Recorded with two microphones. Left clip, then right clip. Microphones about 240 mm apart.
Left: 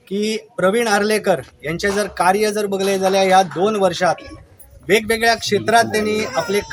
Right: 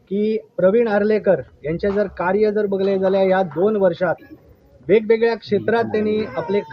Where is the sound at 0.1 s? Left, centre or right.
Centre.